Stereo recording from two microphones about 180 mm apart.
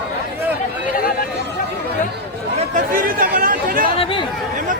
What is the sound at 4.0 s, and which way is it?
Chatter, 30° left (ahead or behind).